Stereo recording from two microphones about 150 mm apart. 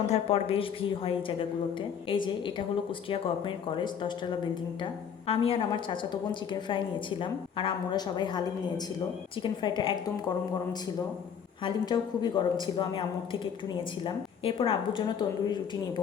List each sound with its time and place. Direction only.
0.1 s a woman's voice: 40° left (ahead or behind)
9.4 s a woman's voice: 30° left (ahead or behind)
11.6 s a woman's voice: 30° left (ahead or behind)
14.0 s a woman's voice: 40° left (ahead or behind)